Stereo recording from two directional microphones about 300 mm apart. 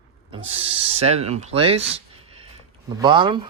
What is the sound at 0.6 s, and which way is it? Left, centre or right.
Speech, centre.